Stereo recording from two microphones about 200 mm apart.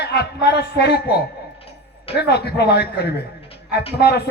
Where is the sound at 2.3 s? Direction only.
55° left (ahead or behind).